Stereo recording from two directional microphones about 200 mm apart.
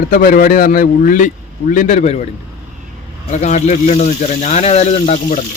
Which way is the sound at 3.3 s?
35° left (ahead or behind).